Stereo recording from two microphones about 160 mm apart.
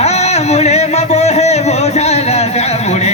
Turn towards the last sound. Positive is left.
turn(degrees=45)  # may be behind; listen again after turning